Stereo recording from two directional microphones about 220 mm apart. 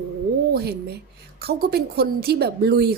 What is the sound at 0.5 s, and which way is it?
A woman's voice, 45° right (ahead or behind).